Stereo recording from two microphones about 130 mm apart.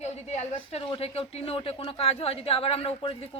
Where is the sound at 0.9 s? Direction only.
50° left (ahead or behind).